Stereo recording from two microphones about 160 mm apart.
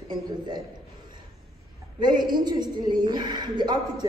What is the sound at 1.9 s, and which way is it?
A man's voice, 25° right (ahead or behind).